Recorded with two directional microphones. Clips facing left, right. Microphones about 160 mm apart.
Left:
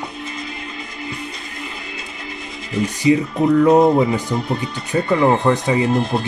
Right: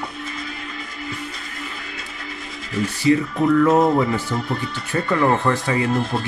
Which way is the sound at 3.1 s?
20° left (ahead or behind).